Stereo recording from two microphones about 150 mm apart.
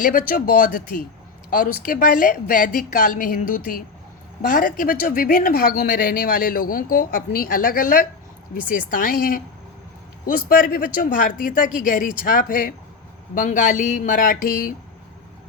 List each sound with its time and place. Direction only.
0.0 s speech: 65° left (ahead or behind)